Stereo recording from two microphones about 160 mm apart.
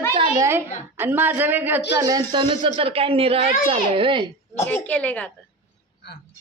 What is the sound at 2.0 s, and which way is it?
A man's voice, 25° right (ahead or behind).